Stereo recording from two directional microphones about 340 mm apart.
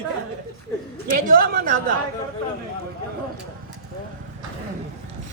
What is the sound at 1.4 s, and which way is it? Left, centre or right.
Speech, right.